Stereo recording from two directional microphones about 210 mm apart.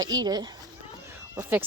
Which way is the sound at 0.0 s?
20° right (ahead or behind).